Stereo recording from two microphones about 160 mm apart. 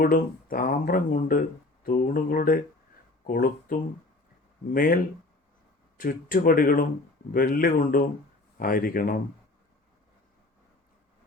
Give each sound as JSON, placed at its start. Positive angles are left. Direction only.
{"t": 0.0, "sound": "speech", "side_deg": 65}
{"t": 6.0, "sound": "speech", "side_deg": 60}